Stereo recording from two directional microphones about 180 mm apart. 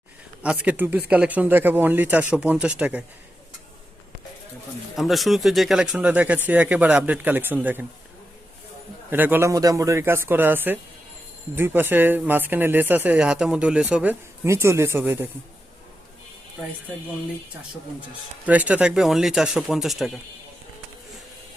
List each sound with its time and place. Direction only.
0.4 s speech: 5° right (ahead or behind)
4.9 s speech: centre (ahead or behind)
9.0 s speech: 10° right (ahead or behind)
18.4 s speech: 10° right (ahead or behind)